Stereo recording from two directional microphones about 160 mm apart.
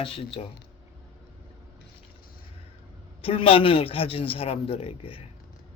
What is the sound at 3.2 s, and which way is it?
A man's voice, 35° left (ahead or behind).